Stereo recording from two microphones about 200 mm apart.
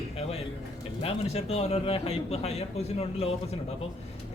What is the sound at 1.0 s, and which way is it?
Speech, 30° left (ahead or behind).